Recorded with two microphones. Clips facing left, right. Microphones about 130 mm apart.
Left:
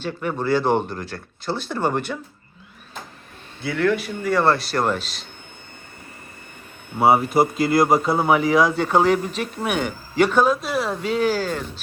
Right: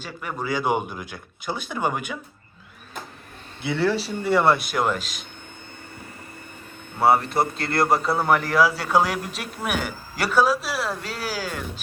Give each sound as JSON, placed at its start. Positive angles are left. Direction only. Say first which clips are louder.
{"t": 0.2, "sound": "speech", "louder": "left 5 dB", "side_deg": -5}
{"t": 3.6, "sound": "speech", "louder": "left 2 dB", "side_deg": -25}
{"t": 4.7, "sound": "speech", "louder": "left 2 dB", "side_deg": 0}
{"t": 7.0, "sound": "speech", "louder": "left 3 dB", "side_deg": 0}